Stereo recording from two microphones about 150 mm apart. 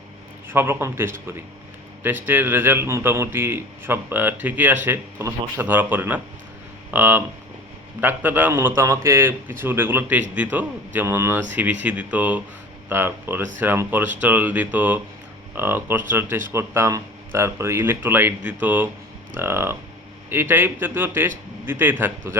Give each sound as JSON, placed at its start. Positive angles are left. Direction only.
{"t": 0.4, "sound": "a man's voice", "side_deg": -15}